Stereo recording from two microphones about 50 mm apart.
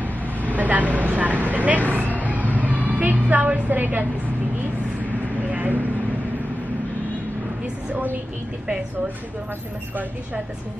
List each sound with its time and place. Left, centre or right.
0.0 s vehicle: right
0.9 s speech: right
5.5 s vehicle: right
7.9 s a woman's voice: right